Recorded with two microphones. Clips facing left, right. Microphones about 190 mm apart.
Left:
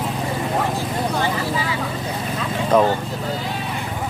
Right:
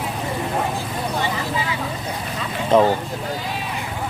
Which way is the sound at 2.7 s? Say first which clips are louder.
Right 1 dB; 10° right (ahead or behind).